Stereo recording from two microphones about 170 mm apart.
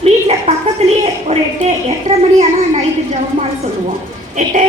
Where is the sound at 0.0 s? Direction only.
40° right (ahead or behind).